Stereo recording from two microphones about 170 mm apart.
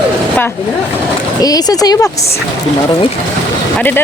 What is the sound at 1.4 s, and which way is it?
Speech, 20° left (ahead or behind).